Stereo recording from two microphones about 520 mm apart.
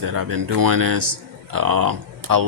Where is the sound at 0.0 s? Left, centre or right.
Right.